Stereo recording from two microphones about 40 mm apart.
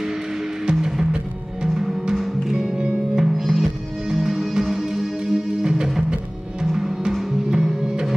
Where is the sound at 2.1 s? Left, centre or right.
Centre.